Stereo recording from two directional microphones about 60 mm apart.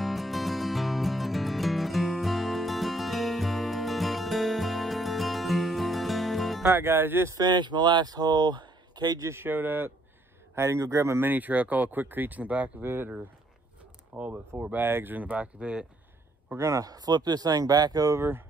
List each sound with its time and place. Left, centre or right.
0.0 s music: centre
6.7 s speech: right
8.1 s speech: right
9.3 s speech: right
10.5 s speech: right
11.2 s speech: right
12.8 s speech: right
14.1 s speech: right
16.5 s speech: right
18.1 s speech: right